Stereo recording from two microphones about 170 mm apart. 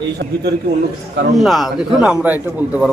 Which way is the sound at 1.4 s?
Centre (ahead or behind).